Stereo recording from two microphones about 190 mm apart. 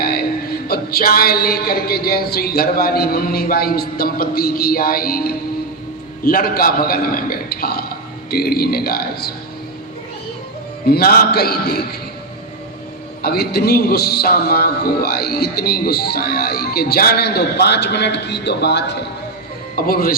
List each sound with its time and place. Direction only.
0.0 s a sound: 55° left (ahead or behind)
0.7 s music: 55° left (ahead or behind)
8.3 s a man's voice: 55° left (ahead or behind)
10.8 s a man's voice: 55° left (ahead or behind)
13.2 s a man's voice: 55° left (ahead or behind)
19.7 s music: 50° left (ahead or behind)